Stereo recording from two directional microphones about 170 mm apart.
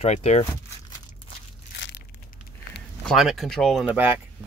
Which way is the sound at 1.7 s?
90° left.